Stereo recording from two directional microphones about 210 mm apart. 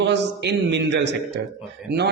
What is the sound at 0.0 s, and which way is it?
A man's voice, 55° right (ahead or behind).